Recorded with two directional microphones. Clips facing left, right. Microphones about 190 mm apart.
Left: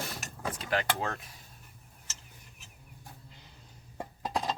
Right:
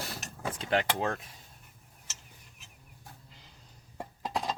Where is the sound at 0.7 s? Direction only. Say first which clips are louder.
Right 3 dB; 25° right (ahead or behind).